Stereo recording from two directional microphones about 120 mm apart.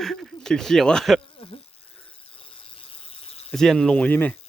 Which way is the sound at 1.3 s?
50° left (ahead or behind).